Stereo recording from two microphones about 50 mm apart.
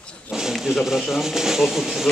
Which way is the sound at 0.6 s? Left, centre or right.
Centre.